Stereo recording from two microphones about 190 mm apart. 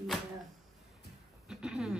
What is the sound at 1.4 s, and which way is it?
Speech, 5° right (ahead or behind).